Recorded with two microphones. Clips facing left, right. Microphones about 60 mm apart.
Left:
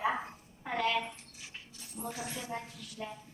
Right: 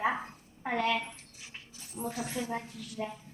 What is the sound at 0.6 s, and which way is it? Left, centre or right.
Speech, right.